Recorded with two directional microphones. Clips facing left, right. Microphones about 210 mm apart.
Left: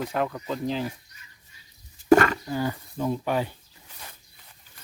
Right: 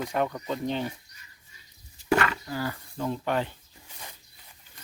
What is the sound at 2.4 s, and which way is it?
Speech, 20° left (ahead or behind).